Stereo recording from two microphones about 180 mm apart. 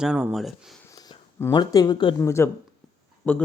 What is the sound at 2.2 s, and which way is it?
A man's voice, 15° left (ahead or behind).